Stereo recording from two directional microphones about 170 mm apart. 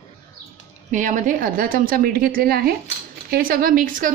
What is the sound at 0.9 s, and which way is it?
A woman's voice, 50° right (ahead or behind).